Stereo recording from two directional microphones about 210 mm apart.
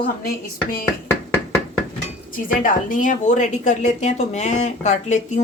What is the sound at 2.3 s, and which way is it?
A woman's voice, 40° left (ahead or behind).